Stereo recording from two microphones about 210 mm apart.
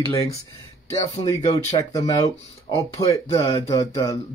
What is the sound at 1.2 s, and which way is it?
Speech, 20° left (ahead or behind).